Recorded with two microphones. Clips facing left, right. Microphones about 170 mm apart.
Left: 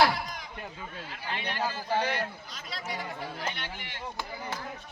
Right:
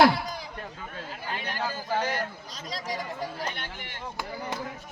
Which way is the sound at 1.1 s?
40° right (ahead or behind).